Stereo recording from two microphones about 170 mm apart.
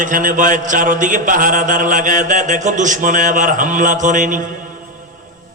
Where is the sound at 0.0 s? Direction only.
50° right (ahead or behind).